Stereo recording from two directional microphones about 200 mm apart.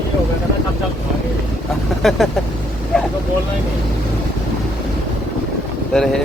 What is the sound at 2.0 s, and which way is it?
Speech, centre (ahead or behind).